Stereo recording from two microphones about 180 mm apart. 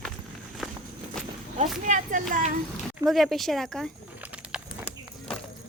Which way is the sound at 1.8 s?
45° right (ahead or behind).